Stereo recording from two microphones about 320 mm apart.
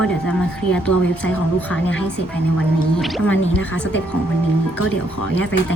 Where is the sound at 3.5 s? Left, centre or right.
Left.